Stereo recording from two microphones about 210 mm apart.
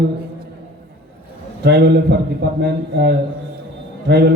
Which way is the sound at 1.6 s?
50° right (ahead or behind).